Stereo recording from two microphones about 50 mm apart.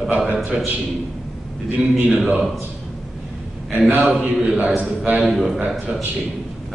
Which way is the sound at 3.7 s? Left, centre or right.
Right.